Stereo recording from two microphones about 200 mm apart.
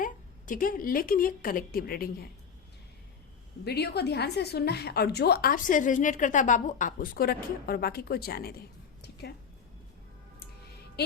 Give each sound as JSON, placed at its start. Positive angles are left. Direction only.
{"t": 0.0, "sound": "a woman's voice", "side_deg": 40}
{"t": 3.6, "sound": "a woman's voice", "side_deg": 55}